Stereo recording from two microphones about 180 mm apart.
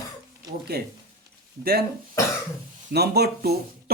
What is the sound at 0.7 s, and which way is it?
Speech, 60° right (ahead or behind).